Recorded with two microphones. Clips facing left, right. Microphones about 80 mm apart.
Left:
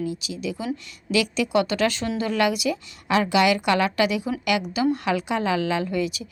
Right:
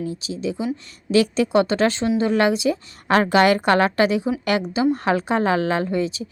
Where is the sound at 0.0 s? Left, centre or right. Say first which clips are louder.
Right 2 dB; right.